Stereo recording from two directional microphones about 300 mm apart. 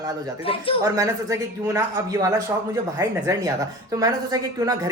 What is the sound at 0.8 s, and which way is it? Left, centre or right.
Speech, centre.